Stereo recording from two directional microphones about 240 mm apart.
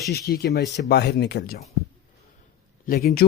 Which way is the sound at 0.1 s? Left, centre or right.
Left.